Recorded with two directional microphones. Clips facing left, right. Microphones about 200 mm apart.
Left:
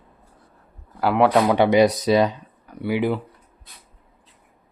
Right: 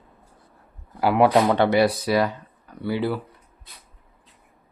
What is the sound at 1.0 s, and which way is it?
Speech, centre (ahead or behind).